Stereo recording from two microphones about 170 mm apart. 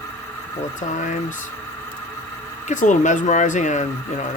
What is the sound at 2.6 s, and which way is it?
Speech, 45° left (ahead or behind).